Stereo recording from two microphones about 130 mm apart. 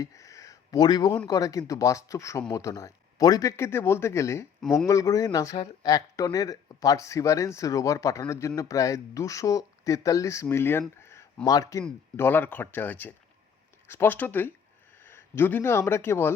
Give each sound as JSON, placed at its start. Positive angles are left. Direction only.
{"t": 0.0, "sound": "a sound", "side_deg": 25}
{"t": 1.3, "sound": "speech", "side_deg": 25}
{"t": 12.1, "sound": "speech", "side_deg": 15}